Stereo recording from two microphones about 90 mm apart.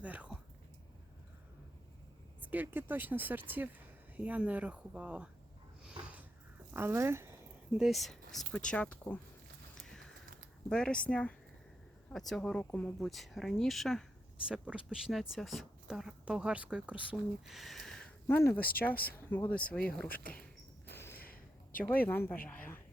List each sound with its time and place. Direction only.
0.0 s a sound: 15° right (ahead or behind)
2.4 s speech: 20° right (ahead or behind)
5.8 s sniff: 15° right (ahead or behind)
6.7 s speech: 25° right (ahead or behind)
7.7 s speech: centre (ahead or behind); by 9.1 s 15° left (ahead or behind)
9.7 s clip-clop: 5° left (ahead or behind)
10.7 s speech: 10° left (ahead or behind)
14.4 s speech: 10° right (ahead or behind)
17.5 s a sound: centre (ahead or behind)
18.3 s speech: 25° left (ahead or behind); by 20.1 s 10° left (ahead or behind)
20.9 s a sound: 25° left (ahead or behind)
21.8 s speech: 20° left (ahead or behind)